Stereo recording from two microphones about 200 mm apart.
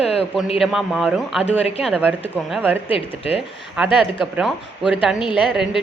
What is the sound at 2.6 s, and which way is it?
Speech, 10° right (ahead or behind).